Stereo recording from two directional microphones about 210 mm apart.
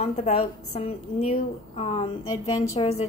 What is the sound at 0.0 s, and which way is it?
A woman's voice, 30° left (ahead or behind).